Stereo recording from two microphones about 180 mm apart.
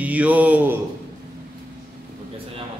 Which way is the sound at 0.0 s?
10° right (ahead or behind).